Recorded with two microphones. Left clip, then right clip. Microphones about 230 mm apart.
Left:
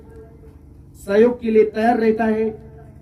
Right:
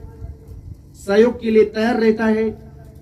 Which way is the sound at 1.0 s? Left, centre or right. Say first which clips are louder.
Right 1 dB; right.